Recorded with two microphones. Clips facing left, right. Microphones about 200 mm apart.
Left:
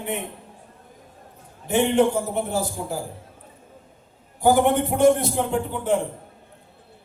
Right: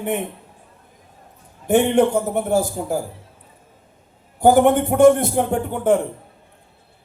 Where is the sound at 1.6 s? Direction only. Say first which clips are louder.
Right 3 dB; 50° right (ahead or behind).